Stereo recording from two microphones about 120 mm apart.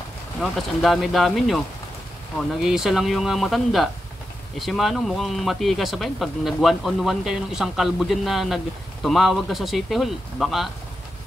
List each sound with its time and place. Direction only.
0.4 s speech: centre (ahead or behind)